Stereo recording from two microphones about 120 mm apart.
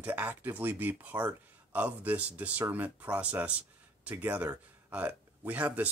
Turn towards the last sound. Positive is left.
turn(degrees=-10)  # may be behind; listen again after turning